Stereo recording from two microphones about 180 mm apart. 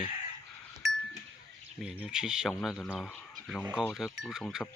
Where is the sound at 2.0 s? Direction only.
5° right (ahead or behind).